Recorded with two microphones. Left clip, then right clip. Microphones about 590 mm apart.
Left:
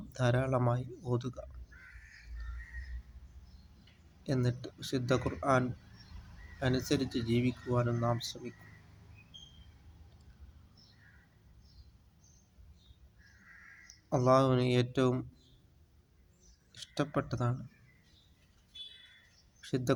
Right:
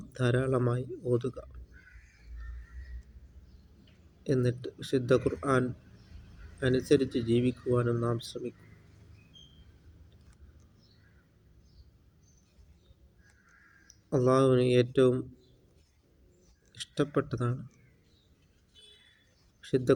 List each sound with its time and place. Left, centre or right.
0.1 s speech: left
4.2 s speech: left
14.1 s speech: left
16.7 s speech: left
19.6 s speech: left